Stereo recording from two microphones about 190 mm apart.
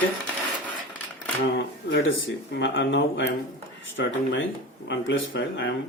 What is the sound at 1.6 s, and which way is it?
Speech, 80° left.